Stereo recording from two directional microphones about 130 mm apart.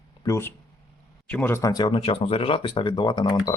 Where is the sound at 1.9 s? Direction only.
45° left (ahead or behind).